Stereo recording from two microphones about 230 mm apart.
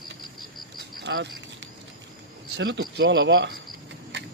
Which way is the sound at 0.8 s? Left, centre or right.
Right.